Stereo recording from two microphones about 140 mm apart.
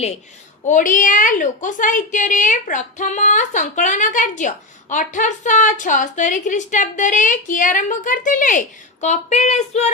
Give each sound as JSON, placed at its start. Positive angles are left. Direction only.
{"t": 0.7, "sound": "a woman's voice", "side_deg": 65}